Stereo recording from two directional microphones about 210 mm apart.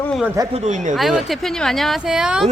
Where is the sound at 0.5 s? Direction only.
30° right (ahead or behind).